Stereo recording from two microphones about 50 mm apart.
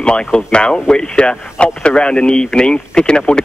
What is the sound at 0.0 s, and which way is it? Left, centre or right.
Speech, centre.